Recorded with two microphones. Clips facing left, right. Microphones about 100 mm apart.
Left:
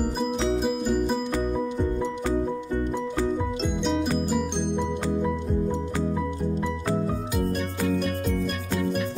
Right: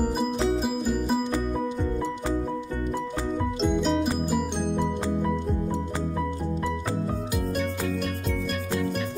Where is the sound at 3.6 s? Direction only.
Centre (ahead or behind).